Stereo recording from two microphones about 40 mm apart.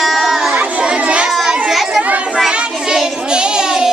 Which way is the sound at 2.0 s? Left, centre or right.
Right.